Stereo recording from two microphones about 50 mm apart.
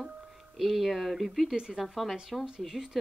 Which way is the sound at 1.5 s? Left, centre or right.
Centre.